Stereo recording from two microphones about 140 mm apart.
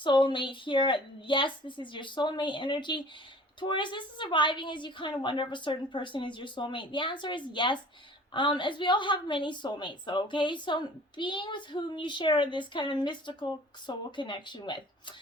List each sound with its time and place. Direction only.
0.0 s a woman's voice: 35° left (ahead or behind)